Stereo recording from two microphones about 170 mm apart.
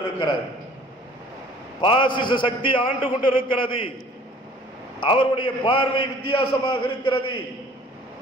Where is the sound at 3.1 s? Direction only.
55° left (ahead or behind).